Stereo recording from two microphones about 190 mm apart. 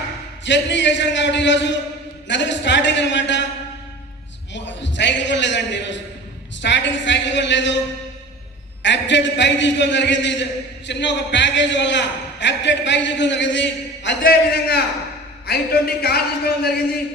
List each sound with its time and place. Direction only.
0.4 s a man's voice: 70° left (ahead or behind)
4.5 s a man's voice: 70° left (ahead or behind)
8.8 s a man's voice: 70° left (ahead or behind)